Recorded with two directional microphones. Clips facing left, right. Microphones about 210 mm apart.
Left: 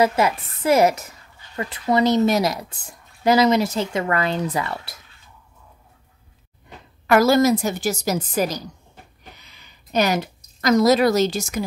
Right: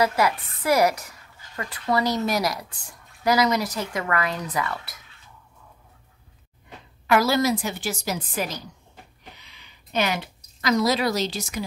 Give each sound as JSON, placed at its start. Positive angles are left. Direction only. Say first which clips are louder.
{"t": 0.0, "sound": "speech", "louder": "left 3 dB", "side_deg": 25}
{"t": 7.1, "sound": "a woman's voice", "louder": "left 5 dB", "side_deg": 45}